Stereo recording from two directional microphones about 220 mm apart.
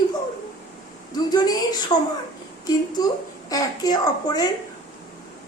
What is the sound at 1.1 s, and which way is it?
Speech, 20° left (ahead or behind).